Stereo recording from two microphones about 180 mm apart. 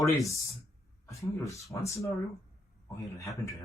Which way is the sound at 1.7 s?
15° left (ahead or behind).